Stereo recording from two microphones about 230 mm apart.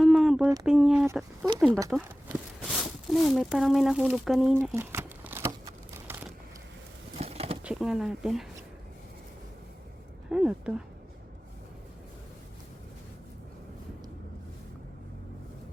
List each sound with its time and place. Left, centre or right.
0.0 s a sound: centre
0.6 s speech: centre
5.5 s a sound: centre
7.2 s bird: right
7.6 s speech: centre
10.3 s speech: centre